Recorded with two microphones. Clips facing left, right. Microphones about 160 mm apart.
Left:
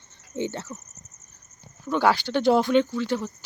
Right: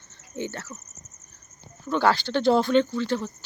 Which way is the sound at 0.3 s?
20° left (ahead or behind).